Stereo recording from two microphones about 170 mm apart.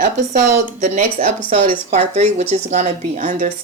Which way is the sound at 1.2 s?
55° right (ahead or behind).